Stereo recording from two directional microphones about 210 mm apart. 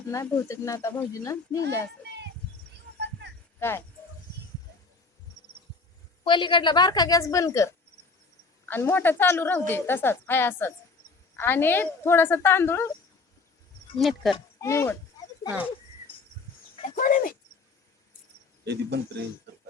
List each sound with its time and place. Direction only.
0.1 s a woman's voice: 15° left (ahead or behind)
2.1 s a sound: 55° right (ahead or behind)
3.6 s a woman's voice: 10° left (ahead or behind)
6.2 s a woman's voice: 20° left (ahead or behind)
14.0 s speech: centre (ahead or behind)
14.3 s speech: 15° left (ahead or behind)
15.4 s speech: 5° right (ahead or behind)
16.9 s speech: 40° left (ahead or behind)
18.6 s speech: 55° right (ahead or behind)